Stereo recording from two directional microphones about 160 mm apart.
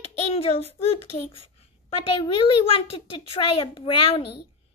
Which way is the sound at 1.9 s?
35° left (ahead or behind).